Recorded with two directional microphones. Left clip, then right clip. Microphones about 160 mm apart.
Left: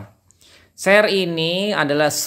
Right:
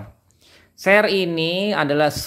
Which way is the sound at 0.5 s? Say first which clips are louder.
Left 1 dB; centre (ahead or behind).